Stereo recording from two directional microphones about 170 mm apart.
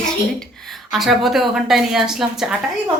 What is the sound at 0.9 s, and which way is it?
A woman's voice, centre (ahead or behind).